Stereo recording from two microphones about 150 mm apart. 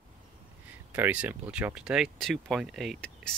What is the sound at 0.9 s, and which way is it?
Speech, 10° right (ahead or behind).